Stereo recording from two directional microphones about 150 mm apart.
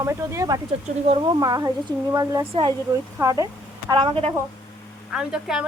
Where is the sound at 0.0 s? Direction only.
20° right (ahead or behind).